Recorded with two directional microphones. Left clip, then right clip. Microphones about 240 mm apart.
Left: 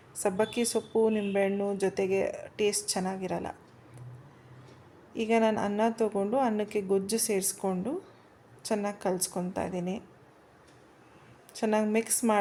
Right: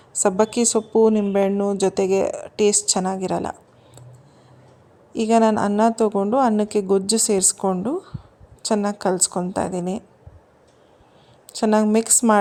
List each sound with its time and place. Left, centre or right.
0.2 s speech: right
5.1 s speech: right
11.5 s speech: right